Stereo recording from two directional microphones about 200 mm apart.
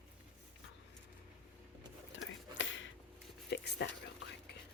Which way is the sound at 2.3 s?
70° left (ahead or behind).